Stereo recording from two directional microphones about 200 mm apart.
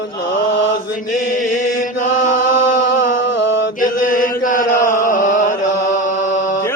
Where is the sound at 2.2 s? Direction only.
40° left (ahead or behind).